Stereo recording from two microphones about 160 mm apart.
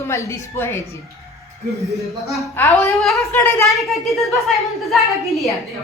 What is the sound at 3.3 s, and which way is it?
Speech, 15° left (ahead or behind).